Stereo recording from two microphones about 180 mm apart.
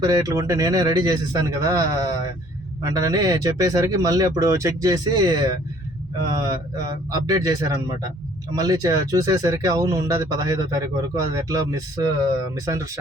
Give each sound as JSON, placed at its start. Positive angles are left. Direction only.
{"t": 0.0, "sound": "speech", "side_deg": -20}